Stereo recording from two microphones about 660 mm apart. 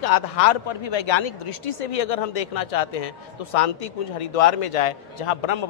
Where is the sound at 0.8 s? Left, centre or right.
Left.